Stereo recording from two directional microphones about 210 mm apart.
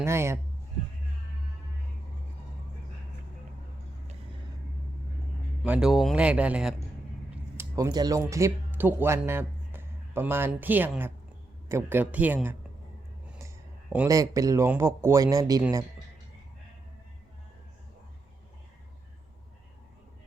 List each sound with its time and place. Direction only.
0.0 s speech: 10° right (ahead or behind)
5.6 s speech: 5° right (ahead or behind)
13.2 s a sound: 5° right (ahead or behind)
13.9 s speech: 10° right (ahead or behind)